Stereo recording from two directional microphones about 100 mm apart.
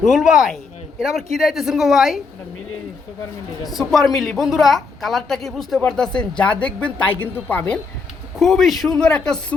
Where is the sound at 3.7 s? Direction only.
Centre (ahead or behind); by 7.8 s 15° left (ahead or behind).